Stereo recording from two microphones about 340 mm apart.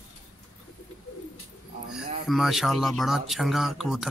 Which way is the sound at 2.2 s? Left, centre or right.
Centre.